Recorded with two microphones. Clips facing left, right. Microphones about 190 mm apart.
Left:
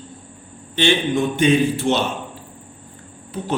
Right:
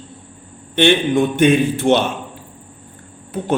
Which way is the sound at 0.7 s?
55° right (ahead or behind).